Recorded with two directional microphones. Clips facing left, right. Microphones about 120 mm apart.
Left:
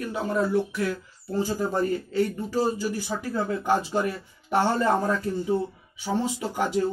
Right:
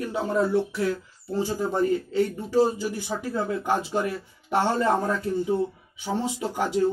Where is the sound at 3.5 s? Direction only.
10° right (ahead or behind).